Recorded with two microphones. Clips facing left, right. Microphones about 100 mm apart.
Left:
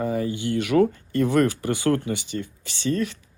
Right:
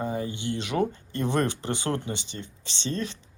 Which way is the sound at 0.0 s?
25° right (ahead or behind).